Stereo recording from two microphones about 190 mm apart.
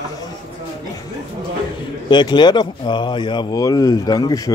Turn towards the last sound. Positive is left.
turn(degrees=20)  # may be behind; listen again after turning